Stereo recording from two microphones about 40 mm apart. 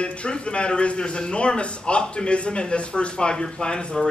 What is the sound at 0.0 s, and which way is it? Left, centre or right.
A man's voice, left.